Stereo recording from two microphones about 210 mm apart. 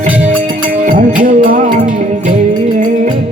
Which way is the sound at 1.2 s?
40° right (ahead or behind).